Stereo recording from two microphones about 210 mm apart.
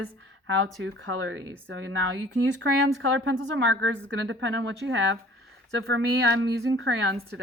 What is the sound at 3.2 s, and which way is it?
Speech, 65° right (ahead or behind).